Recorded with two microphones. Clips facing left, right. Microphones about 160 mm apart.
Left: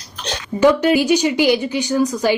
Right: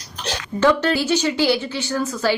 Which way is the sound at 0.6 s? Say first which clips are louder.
Left 4 dB; 15° left (ahead or behind).